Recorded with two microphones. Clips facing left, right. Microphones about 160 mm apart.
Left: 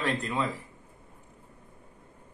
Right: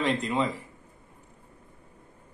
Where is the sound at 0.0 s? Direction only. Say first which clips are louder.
Right 3 dB; 15° right (ahead or behind).